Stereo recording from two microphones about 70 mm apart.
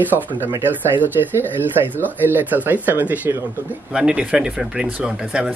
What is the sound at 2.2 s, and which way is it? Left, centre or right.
Speech, right.